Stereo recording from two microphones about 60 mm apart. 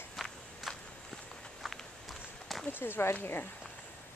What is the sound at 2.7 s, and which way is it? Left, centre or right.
Speech, left.